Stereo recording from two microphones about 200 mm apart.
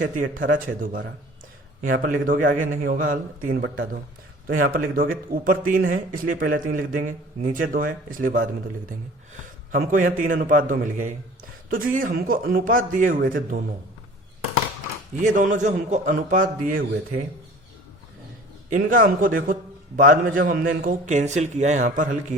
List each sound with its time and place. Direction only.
0.0 s speech: 40° right (ahead or behind)
9.7 s a man's voice: 45° right (ahead or behind)
15.2 s a man's voice: 40° right (ahead or behind)
18.7 s a man's voice: 45° right (ahead or behind)